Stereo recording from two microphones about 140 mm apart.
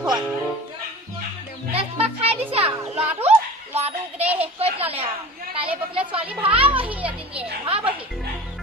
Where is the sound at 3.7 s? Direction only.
50° right (ahead or behind).